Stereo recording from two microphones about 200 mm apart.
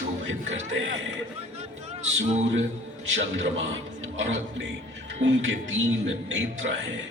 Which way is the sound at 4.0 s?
70° right (ahead or behind).